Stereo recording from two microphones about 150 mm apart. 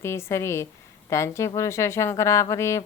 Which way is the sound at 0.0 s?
15° left (ahead or behind).